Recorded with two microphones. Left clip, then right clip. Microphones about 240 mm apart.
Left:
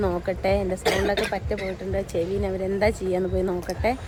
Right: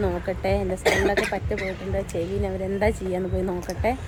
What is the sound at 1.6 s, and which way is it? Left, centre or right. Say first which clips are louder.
Speech: even; centre.